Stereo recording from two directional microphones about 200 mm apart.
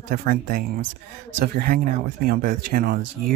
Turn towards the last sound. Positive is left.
turn(degrees=-45)  # may be behind; listen again after turning